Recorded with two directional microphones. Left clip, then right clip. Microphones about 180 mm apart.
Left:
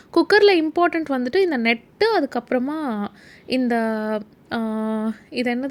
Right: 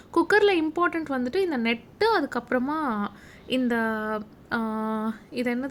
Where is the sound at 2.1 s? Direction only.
20° left (ahead or behind).